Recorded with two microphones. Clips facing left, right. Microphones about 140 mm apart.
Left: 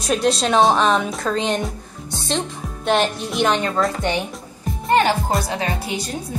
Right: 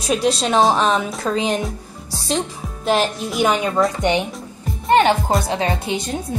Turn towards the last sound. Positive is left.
turn(degrees=-20)  # may be behind; listen again after turning